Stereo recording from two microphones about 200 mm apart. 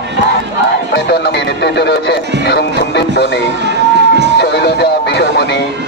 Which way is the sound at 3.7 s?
60° right (ahead or behind).